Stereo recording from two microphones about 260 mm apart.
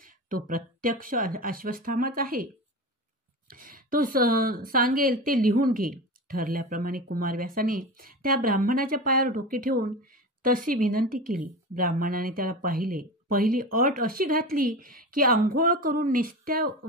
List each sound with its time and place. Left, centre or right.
0.0 s speech: right